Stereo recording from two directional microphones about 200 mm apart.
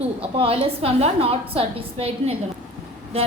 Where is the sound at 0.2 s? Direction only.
30° right (ahead or behind).